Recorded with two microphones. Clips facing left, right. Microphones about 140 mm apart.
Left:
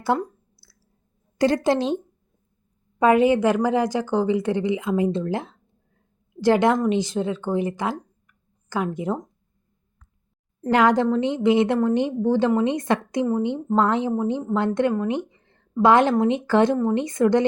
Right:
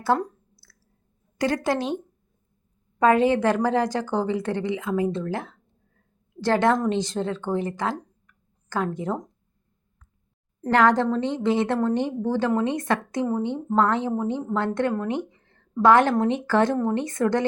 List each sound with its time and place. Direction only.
0.1 s a woman's voice: 10° left (ahead or behind)
1.4 s a woman's voice: 30° left (ahead or behind)
3.0 s a woman's voice: 15° left (ahead or behind)
10.7 s a woman's voice: 10° left (ahead or behind)